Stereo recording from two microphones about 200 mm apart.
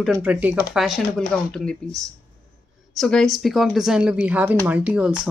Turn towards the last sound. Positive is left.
turn(degrees=-5)  # may be behind; listen again after turning